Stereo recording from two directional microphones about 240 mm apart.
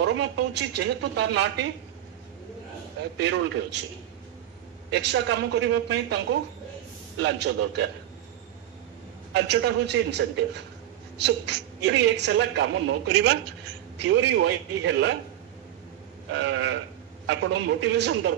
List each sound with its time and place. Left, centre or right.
0.0 s a woman's voice: right
3.2 s a woman's voice: right
4.9 s a woman's voice: right
9.3 s a woman's voice: right
14.0 s a woman's voice: right
16.3 s a woman's voice: right